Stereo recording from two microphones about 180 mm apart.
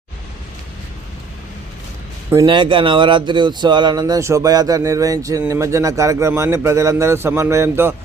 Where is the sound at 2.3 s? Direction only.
20° right (ahead or behind).